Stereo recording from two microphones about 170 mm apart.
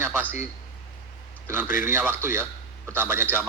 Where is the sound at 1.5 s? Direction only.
15° right (ahead or behind).